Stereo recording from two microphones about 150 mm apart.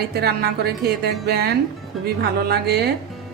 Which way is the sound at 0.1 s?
90° right.